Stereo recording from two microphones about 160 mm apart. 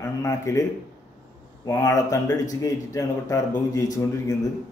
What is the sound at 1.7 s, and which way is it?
Speech, 20° left (ahead or behind).